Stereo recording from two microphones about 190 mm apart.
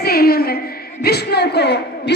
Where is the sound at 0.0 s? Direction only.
55° left (ahead or behind).